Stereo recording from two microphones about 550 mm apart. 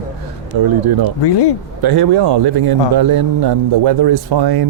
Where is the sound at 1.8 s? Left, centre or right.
Right.